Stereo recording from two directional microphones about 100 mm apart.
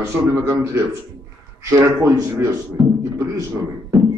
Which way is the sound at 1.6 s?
25° right (ahead or behind).